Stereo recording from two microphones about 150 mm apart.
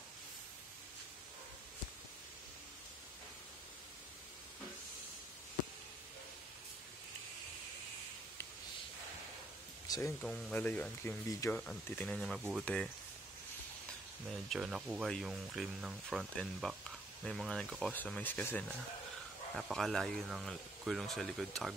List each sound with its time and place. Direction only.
9.8 s a sound: 25° left (ahead or behind)
10.2 s speech: 5° left (ahead or behind)
14.2 s speech: centre (ahead or behind)
19.5 s speech: centre (ahead or behind)